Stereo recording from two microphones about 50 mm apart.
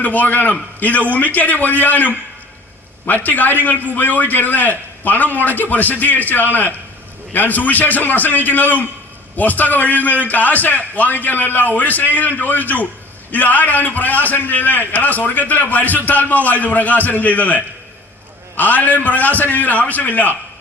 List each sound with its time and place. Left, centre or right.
0.0 s a man's voice: left